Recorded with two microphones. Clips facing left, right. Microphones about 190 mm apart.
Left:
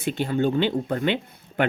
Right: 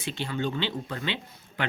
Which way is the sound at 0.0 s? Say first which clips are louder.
Left 8 dB; 50° left (ahead or behind).